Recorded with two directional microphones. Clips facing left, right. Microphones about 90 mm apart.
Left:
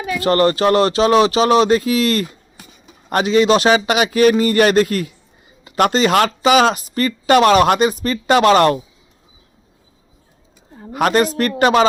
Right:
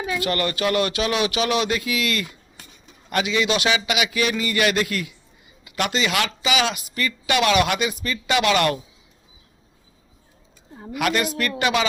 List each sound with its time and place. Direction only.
0.2 s speech: 35° left (ahead or behind)
10.9 s speech: 40° left (ahead or behind)